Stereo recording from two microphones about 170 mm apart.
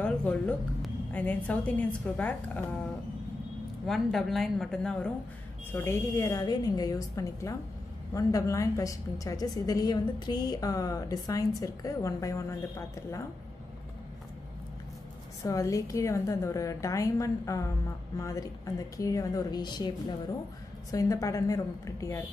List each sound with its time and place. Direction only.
0.0 s a woman's voice: 10° left (ahead or behind)
3.8 s a woman's voice: centre (ahead or behind)
5.7 s a woman's voice: 15° left (ahead or behind)
15.4 s a woman's voice: 20° left (ahead or behind)